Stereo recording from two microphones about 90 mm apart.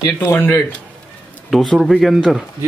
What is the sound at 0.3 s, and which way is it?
Speech, 25° left (ahead or behind).